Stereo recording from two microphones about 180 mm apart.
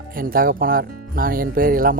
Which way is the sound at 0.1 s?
50° right (ahead or behind).